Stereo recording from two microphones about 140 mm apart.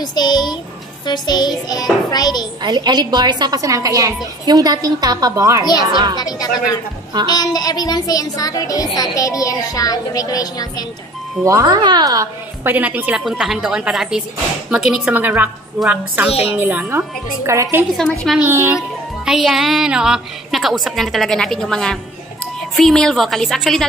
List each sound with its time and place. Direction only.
0.0 s music: 30° left (ahead or behind)
2.0 s speech: 30° left (ahead or behind)
2.6 s a woman's voice: 30° right (ahead or behind)
5.6 s speech: 30° left (ahead or behind)
5.9 s speech: 30° right (ahead or behind)
6.1 s speech: 30° left (ahead or behind)
11.4 s a woman's voice: 25° right (ahead or behind)
12.6 s a woman's voice: 15° right (ahead or behind)
16.3 s a woman's voice: 45° left (ahead or behind)
16.5 s a woman's voice: 10° right (ahead or behind)
19.2 s a woman's voice: centre (ahead or behind)